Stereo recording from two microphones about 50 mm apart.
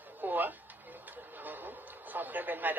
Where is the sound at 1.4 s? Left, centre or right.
Right.